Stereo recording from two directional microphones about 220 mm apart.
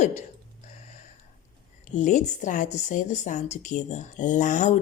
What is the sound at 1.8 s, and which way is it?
A woman's voice, 35° left (ahead or behind).